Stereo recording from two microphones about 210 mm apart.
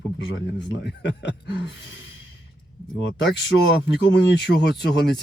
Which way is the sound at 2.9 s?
55° left (ahead or behind).